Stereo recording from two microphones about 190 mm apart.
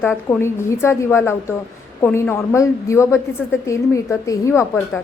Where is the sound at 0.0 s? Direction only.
10° left (ahead or behind).